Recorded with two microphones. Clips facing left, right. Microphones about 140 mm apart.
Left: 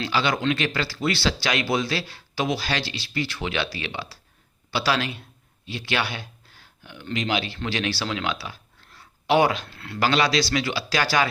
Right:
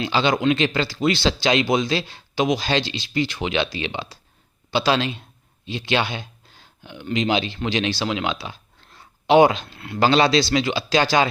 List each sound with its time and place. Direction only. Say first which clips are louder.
0.0 s speech: right 4 dB; 25° right (ahead or behind)